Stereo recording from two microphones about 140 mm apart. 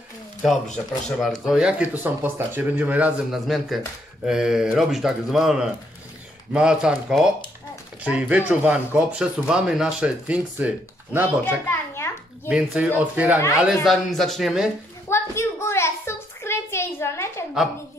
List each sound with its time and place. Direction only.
0.7 s speech: 5° left (ahead or behind)
11.4 s children playing: 20° left (ahead or behind)
12.4 s speech: 5° right (ahead or behind)
13.8 s speech: centre (ahead or behind)
15.0 s a sound: 20° left (ahead or behind)